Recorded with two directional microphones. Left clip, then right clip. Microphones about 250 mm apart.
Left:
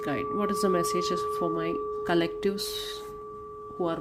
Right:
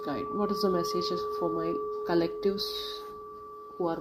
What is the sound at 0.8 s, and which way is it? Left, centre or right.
Speech, left.